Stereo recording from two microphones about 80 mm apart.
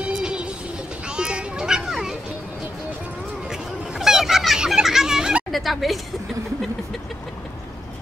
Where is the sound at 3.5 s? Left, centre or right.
Centre.